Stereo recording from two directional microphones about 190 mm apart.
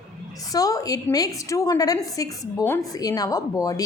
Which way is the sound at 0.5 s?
20° left (ahead or behind).